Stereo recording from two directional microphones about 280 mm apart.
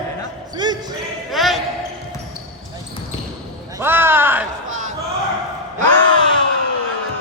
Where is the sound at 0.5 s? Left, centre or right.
Centre.